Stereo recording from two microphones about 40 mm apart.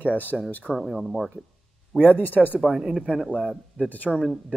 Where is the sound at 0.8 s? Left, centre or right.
Centre.